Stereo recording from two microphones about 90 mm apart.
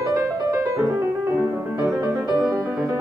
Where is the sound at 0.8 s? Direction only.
30° right (ahead or behind).